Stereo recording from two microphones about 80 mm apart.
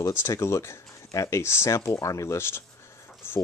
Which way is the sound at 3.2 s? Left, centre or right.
Left.